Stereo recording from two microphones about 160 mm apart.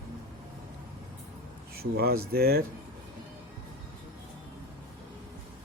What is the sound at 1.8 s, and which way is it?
Speech, 70° right (ahead or behind).